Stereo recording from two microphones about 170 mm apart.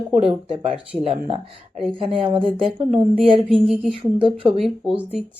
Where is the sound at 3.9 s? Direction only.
30° right (ahead or behind).